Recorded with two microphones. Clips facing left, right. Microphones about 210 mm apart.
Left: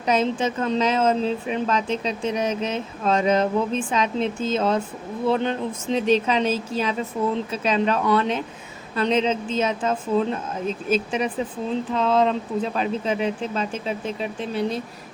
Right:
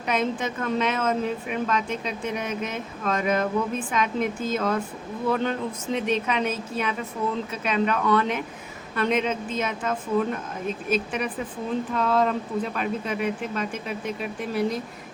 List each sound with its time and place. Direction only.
0.1 s speech: 30° left (ahead or behind)